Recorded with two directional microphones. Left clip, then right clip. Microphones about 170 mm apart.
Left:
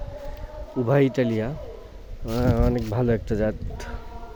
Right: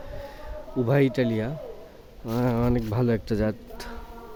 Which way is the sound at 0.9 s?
5° right (ahead or behind).